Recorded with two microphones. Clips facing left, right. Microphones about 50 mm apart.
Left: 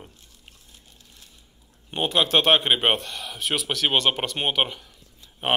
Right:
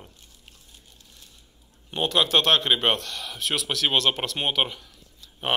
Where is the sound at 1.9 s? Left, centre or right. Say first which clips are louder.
Left 1 dB; centre.